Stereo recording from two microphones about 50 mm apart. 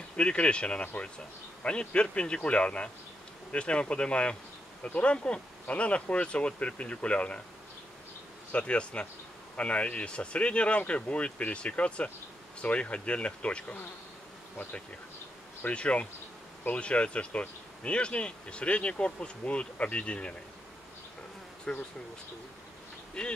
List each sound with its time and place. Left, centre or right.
0.1 s speech: left
8.5 s speech: left
15.6 s speech: left
21.7 s speech: centre
23.2 s speech: centre